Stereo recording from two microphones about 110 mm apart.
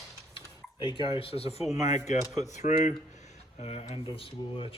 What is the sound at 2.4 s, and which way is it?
Speech, 90° left.